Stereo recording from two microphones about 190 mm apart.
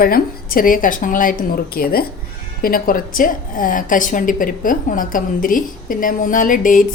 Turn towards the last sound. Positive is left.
turn(degrees=45)  # may be behind; listen again after turning